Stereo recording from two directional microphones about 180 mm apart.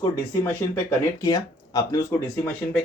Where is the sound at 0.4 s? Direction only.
15° left (ahead or behind).